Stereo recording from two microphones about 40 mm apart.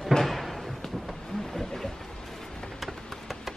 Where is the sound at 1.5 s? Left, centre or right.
Centre.